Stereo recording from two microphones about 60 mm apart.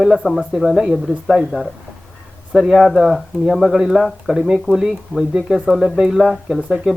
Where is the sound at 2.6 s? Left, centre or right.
Centre.